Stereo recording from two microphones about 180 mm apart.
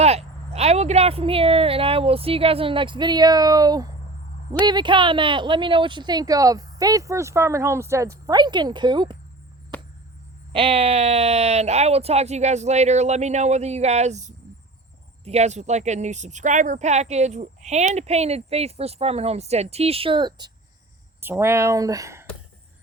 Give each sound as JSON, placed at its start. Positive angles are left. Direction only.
{"t": 0.0, "sound": "a woman's voice", "side_deg": -35}
{"t": 10.5, "sound": "a woman's voice", "side_deg": -30}
{"t": 21.2, "sound": "speech", "side_deg": -15}